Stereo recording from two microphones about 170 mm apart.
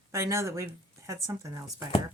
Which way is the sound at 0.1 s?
15° right (ahead or behind).